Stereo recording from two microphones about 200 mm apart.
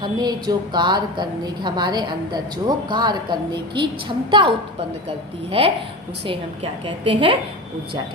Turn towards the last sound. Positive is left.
turn(degrees=-25)  # may be behind; listen again after turning